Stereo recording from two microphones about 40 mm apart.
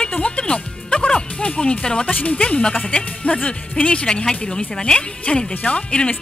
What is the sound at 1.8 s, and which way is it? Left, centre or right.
Speech, left.